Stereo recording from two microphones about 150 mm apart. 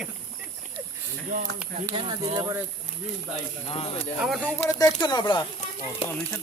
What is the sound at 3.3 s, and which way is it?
Speech, 40° left (ahead or behind).